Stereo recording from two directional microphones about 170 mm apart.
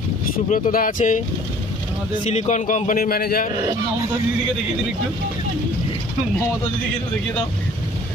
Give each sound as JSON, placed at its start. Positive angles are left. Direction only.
{"t": 0.5, "sound": "a man's voice", "side_deg": 55}
{"t": 2.2, "sound": "a man's voice", "side_deg": 45}